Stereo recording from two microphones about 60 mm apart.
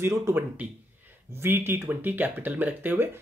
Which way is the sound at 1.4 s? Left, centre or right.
Right.